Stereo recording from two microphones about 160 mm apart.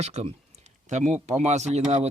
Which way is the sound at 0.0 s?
45° right (ahead or behind).